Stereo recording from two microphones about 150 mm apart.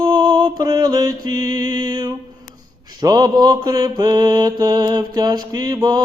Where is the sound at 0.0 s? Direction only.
25° right (ahead or behind).